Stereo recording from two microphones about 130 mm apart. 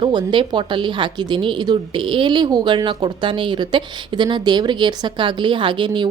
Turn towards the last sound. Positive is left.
turn(degrees=-40)  # may be behind; listen again after turning